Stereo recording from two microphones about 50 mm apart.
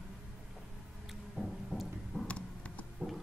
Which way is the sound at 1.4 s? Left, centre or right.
Centre.